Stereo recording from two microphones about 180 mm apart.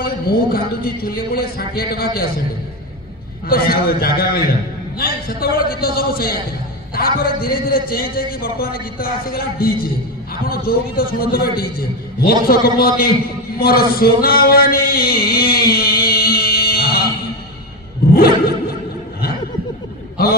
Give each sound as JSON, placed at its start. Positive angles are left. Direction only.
{"t": 0.0, "sound": "a man's voice", "side_deg": 55}
{"t": 3.4, "sound": "a man's voice", "side_deg": 55}
{"t": 13.6, "sound": "a sound", "side_deg": 55}